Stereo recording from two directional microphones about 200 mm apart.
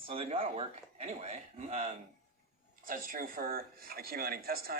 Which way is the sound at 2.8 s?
45° right (ahead or behind).